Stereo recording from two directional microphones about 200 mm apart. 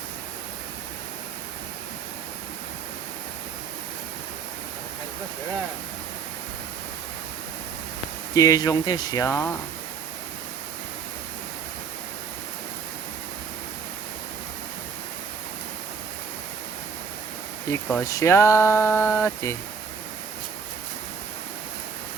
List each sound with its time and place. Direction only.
8.4 s speech: 15° left (ahead or behind)
17.7 s speech: 10° left (ahead or behind)